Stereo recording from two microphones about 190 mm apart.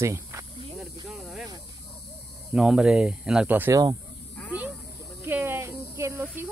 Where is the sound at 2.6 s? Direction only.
5° right (ahead or behind).